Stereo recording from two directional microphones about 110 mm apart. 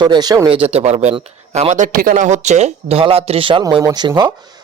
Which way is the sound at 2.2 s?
90° right.